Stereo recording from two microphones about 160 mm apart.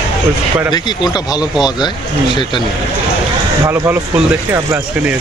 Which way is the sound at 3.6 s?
15° right (ahead or behind).